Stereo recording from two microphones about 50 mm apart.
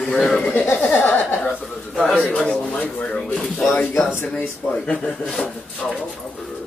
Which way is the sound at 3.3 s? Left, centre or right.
Centre.